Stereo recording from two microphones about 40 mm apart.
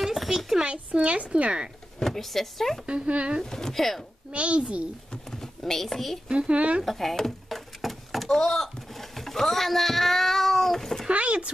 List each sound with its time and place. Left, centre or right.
0.0 s a sound: centre
0.9 s a woman's voice: right
2.0 s speech: centre
2.9 s a woman's voice: right
3.4 s speech: centre
4.3 s a woman's voice: right
5.1 s a sound: centre
6.3 s a woman's voice: right
6.8 s a sound: centre
8.3 s speech: centre
11.1 s a woman's voice: right